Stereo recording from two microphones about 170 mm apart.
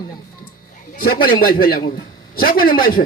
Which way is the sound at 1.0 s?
60° left (ahead or behind).